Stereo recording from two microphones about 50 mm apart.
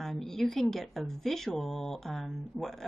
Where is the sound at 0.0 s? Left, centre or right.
Centre.